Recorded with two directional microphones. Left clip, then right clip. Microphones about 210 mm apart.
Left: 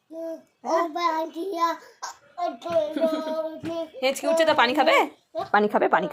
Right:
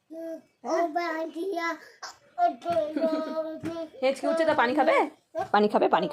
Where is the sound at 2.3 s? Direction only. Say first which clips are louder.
Right 4 dB; 30° right (ahead or behind).